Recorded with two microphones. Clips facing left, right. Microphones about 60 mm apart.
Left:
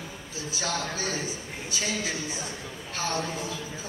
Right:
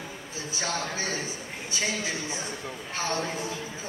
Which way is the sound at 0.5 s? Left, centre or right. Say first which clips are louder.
Even; right.